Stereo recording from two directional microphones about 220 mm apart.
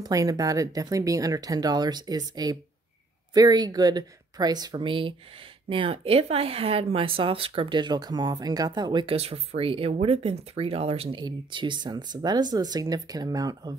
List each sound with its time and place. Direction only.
0.0 s speech: 15° right (ahead or behind)